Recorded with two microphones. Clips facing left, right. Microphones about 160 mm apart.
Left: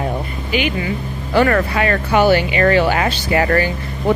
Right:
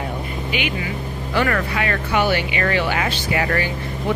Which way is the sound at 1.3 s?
40° left (ahead or behind).